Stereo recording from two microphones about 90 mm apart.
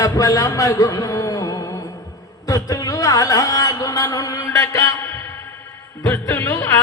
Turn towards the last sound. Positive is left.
turn(degrees=25)  # may be behind; listen again after turning